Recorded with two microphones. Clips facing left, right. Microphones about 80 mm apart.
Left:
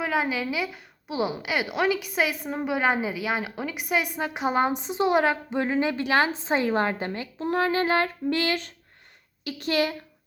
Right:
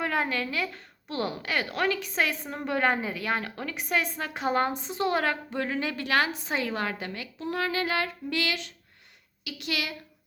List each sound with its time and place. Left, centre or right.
0.0 s a woman's voice: centre; by 9.9 s left